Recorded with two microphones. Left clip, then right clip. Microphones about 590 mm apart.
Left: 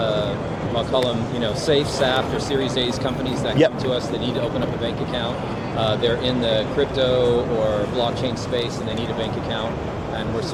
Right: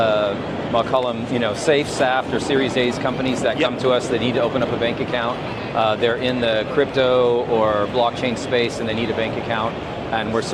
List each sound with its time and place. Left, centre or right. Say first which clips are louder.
0.9 s speech: right 1 dB; right
3.6 s speech: left 6 dB; left
5.8 s speech: right 2 dB; right